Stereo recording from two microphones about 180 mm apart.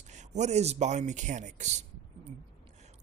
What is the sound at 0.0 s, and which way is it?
Speech, 40° right (ahead or behind).